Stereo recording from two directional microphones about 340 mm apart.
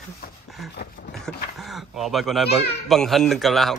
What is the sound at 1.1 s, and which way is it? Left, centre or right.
A child's voice, centre.